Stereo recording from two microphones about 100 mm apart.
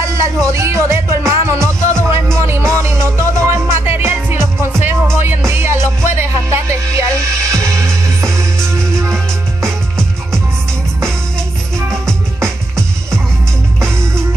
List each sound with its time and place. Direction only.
0.0 s music: 30° right (ahead or behind)
12.4 s music: 25° right (ahead or behind)